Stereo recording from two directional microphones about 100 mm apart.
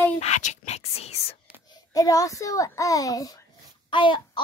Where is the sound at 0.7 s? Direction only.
90° left.